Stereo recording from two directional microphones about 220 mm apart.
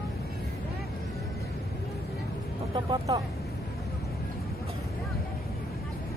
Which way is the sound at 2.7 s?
15° right (ahead or behind).